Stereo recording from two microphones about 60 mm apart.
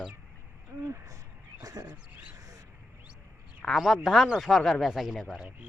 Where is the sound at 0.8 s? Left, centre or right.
Right.